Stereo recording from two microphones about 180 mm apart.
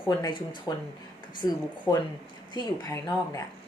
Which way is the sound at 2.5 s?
20° left (ahead or behind).